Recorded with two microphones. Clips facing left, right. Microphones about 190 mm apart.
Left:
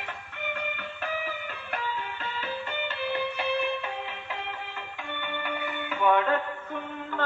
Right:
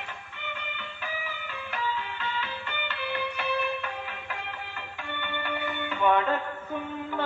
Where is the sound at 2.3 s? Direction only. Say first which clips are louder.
Left 2 dB; 40° left (ahead or behind).